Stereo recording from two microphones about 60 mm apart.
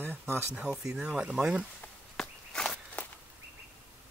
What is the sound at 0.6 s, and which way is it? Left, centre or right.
Speech, centre.